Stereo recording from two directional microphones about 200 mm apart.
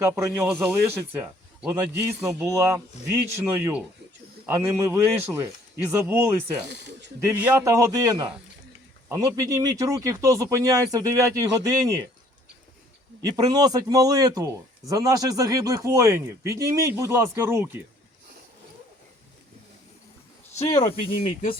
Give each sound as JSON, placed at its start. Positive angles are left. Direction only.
{"t": 0.0, "sound": "a man's voice", "side_deg": -10}
{"t": 6.7, "sound": "speech", "side_deg": -60}
{"t": 7.2, "sound": "a man's voice", "side_deg": -10}
{"t": 13.3, "sound": "a man's voice", "side_deg": -20}
{"t": 20.7, "sound": "speech", "side_deg": 30}